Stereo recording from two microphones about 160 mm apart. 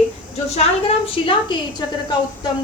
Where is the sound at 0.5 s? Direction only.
35° left (ahead or behind).